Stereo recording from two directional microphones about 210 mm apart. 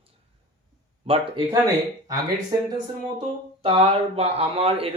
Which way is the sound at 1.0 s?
25° right (ahead or behind).